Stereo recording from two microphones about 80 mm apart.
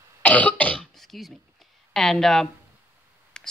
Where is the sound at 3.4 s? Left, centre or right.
Centre.